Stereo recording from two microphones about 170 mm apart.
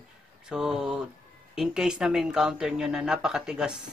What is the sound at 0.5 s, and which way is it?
Speech, 5° right (ahead or behind).